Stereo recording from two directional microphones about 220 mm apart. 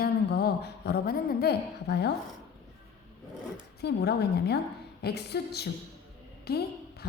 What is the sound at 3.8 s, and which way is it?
A woman's voice, 45° left (ahead or behind).